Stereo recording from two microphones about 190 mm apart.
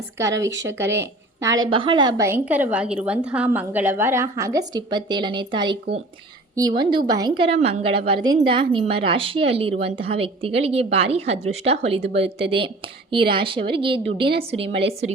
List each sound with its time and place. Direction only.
0.2 s a woman's voice: 15° right (ahead or behind)
1.6 s a woman's voice: 25° right (ahead or behind)